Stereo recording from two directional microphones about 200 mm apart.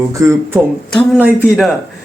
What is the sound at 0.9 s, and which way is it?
Speech, 5° right (ahead or behind).